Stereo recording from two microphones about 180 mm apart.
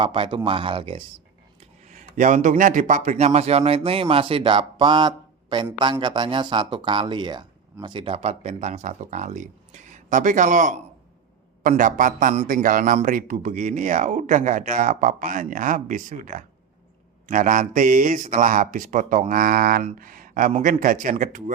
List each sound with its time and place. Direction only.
0.0 s speech: 30° right (ahead or behind)
1.9 s a man's voice: 45° right (ahead or behind)